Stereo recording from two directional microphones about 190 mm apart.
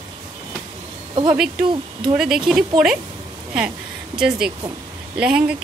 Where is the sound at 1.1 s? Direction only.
25° right (ahead or behind).